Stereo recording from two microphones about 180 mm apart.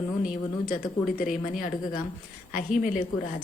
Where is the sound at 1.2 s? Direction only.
50° left (ahead or behind).